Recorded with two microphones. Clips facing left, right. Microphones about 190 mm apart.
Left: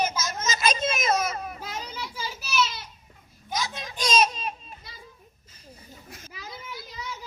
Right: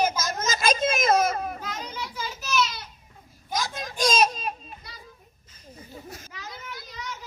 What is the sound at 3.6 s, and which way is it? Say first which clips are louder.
Children playing: right 5 dB; 45° right (ahead or behind).